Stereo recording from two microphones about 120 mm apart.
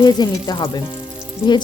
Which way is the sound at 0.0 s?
35° left (ahead or behind).